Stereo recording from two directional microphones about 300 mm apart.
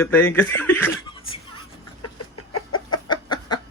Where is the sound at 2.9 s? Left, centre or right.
Centre.